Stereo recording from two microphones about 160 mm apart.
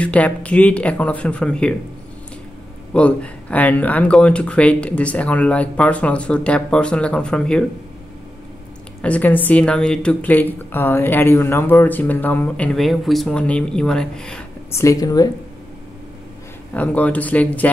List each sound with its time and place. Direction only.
0.0 s a woman's voice: 10° left (ahead or behind)
2.9 s a woman's voice: 5° left (ahead or behind)
9.0 s a woman's voice: 10° left (ahead or behind)
14.7 s a woman's voice: 20° left (ahead or behind)
16.7 s a woman's voice: 10° left (ahead or behind)